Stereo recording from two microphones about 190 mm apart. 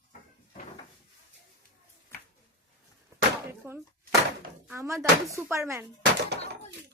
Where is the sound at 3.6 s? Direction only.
10° right (ahead or behind).